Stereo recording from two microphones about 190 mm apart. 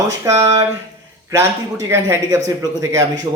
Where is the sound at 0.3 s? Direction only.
15° right (ahead or behind).